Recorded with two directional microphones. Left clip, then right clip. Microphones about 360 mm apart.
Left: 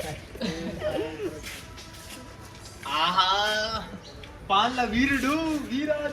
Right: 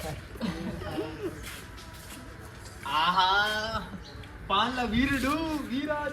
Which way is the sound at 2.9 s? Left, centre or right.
Right.